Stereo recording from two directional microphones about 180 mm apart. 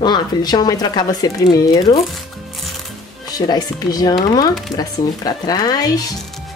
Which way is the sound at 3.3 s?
20° left (ahead or behind).